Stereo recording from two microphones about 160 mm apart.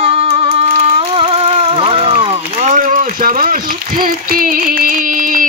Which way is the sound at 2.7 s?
60° right (ahead or behind).